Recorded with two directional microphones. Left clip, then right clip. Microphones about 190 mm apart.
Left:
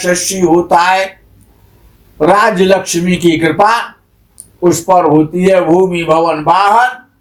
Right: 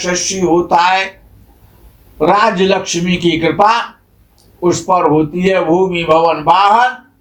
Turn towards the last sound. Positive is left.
turn(degrees=45)  # may be behind; listen again after turning